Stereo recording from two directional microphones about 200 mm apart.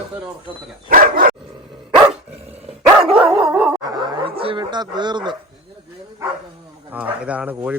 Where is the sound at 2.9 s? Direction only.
5° right (ahead or behind).